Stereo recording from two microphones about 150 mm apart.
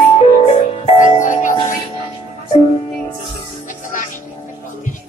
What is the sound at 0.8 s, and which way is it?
Music, 55° left (ahead or behind).